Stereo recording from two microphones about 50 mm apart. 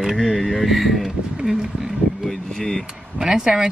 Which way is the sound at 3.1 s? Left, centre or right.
Centre.